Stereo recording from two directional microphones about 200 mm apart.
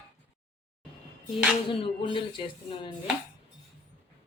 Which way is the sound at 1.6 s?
25° left (ahead or behind).